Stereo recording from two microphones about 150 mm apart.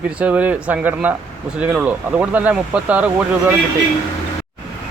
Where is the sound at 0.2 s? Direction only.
10° right (ahead or behind).